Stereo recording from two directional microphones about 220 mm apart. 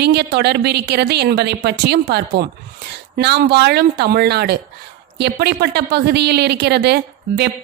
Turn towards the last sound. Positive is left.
turn(degrees=-50)  # may be behind; listen again after turning